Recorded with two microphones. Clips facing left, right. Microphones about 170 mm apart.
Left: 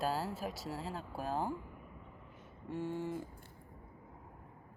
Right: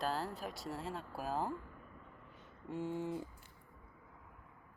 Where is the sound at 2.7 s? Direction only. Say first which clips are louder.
Left 1 dB; 15° right (ahead or behind).